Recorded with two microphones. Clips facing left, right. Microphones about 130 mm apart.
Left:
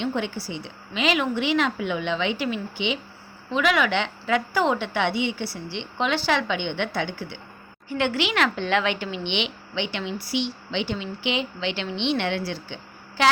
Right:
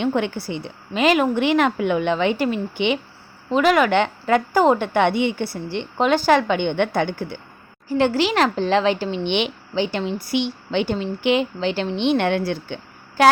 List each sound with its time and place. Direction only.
0.0 s a woman's voice: 55° right (ahead or behind)
3.5 s a woman's voice: 45° right (ahead or behind)
7.9 s a woman's voice: 35° right (ahead or behind)